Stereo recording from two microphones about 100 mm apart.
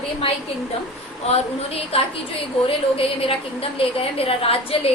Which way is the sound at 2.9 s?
65° left (ahead or behind).